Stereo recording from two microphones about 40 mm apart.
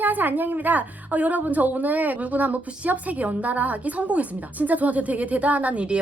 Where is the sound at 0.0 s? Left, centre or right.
Right.